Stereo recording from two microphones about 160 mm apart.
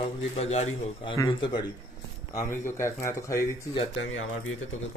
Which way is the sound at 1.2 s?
30° left (ahead or behind).